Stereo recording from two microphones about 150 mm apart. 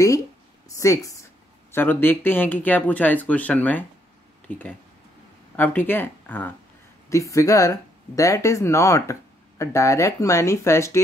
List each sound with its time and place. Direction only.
0.7 s a woman's voice: 20° left (ahead or behind)